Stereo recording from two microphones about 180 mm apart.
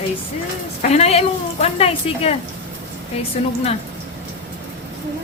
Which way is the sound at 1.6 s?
35° left (ahead or behind).